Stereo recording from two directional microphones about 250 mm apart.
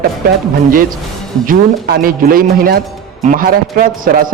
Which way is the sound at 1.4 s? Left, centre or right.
Right.